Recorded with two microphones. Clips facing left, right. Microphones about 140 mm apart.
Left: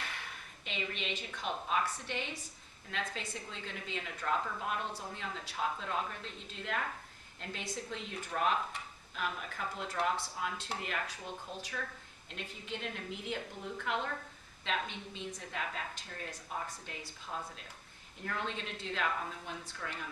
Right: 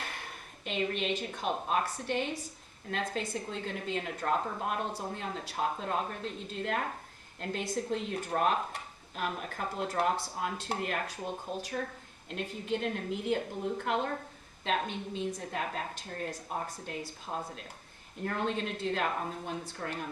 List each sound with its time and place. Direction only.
0.0 s speech: 45° right (ahead or behind)